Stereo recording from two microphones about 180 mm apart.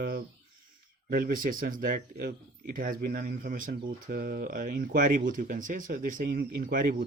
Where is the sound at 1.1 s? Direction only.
50° right (ahead or behind).